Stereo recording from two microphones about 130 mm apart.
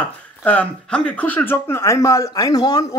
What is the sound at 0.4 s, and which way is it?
Speech, 15° left (ahead or behind).